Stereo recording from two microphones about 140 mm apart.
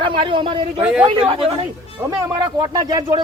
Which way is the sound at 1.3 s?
40° right (ahead or behind).